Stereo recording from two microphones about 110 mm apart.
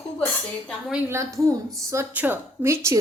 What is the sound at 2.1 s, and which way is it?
Speech, 15° right (ahead or behind).